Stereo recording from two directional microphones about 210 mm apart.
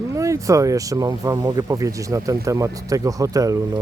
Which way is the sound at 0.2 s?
15° right (ahead or behind).